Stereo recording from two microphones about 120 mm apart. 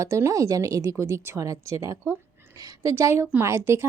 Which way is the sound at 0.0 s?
25° right (ahead or behind).